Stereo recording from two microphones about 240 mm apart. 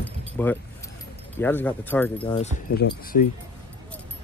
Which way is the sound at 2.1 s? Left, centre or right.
Left.